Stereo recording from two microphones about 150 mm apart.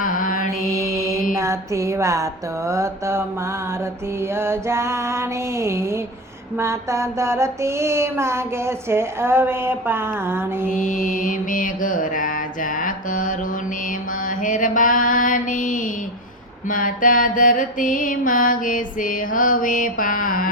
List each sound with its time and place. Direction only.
0.0 s mantra: 65° left (ahead or behind)
0.7 s mantra: 20° right (ahead or behind)
1.4 s a sound: 20° right (ahead or behind)
11.0 s mantra: 65° left (ahead or behind)